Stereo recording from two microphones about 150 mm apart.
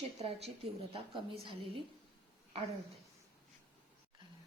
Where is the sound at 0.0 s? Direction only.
40° right (ahead or behind).